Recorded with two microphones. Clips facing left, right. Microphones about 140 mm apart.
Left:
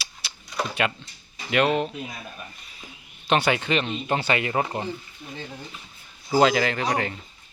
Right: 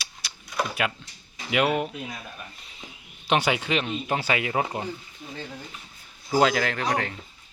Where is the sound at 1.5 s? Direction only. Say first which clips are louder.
Left 2 dB; 10° right (ahead or behind).